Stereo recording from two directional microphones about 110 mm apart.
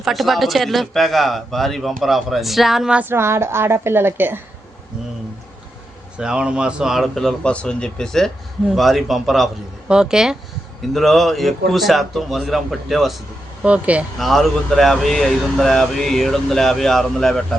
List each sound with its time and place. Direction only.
0.0 s speech: centre (ahead or behind)
3.1 s a woman's voice: 20° right (ahead or behind)
6.1 s speech: 10° right (ahead or behind)
14.2 s speech: centre (ahead or behind)